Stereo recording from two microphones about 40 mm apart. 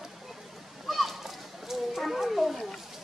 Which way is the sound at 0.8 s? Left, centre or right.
Centre.